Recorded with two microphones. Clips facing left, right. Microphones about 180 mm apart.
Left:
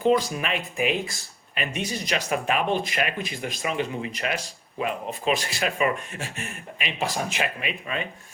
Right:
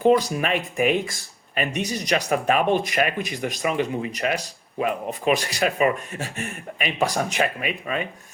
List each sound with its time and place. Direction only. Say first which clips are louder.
0.0 s speech: right 3 dB; 45° right (ahead or behind)